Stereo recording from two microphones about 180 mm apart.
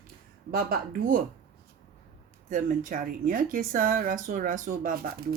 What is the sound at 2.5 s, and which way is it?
Speech, 45° right (ahead or behind).